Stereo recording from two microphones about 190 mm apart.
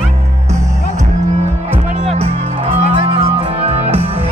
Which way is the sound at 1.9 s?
35° right (ahead or behind).